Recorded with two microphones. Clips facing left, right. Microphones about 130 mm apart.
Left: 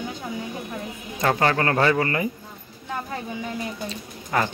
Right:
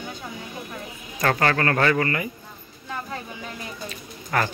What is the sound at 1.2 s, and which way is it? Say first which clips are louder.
Speech: left 1 dB; 20° left (ahead or behind).